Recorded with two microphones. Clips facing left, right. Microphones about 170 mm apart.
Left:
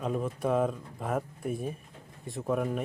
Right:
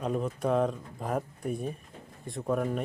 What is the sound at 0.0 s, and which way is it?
Speech, centre (ahead or behind).